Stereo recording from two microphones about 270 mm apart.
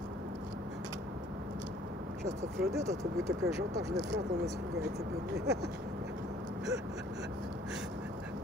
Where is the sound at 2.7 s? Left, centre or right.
Centre.